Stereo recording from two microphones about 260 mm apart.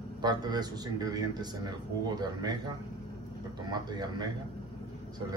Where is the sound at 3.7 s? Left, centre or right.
Centre.